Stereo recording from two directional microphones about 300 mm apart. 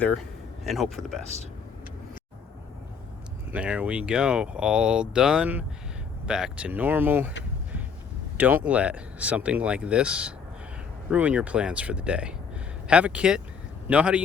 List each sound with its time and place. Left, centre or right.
0.0 s speech: centre
3.5 s speech: centre
8.4 s speech: centre